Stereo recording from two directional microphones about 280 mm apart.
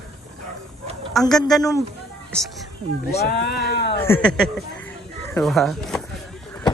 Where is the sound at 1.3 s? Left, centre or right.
Centre.